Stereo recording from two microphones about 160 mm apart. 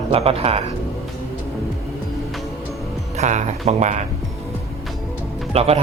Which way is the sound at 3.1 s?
45° right (ahead or behind).